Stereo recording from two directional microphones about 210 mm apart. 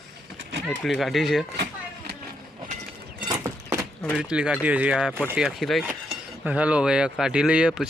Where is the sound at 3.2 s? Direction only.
15° right (ahead or behind).